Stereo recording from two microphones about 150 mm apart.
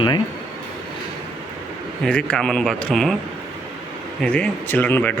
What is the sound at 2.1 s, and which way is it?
Speech, 5° left (ahead or behind).